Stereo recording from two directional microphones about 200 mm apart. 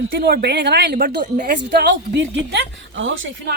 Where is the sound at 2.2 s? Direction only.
65° right (ahead or behind).